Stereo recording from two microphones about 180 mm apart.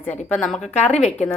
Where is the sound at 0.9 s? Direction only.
40° left (ahead or behind).